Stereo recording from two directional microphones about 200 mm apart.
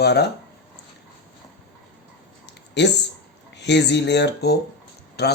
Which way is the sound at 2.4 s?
60° left (ahead or behind).